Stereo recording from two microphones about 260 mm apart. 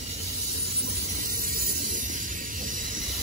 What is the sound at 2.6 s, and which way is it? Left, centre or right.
Train, right.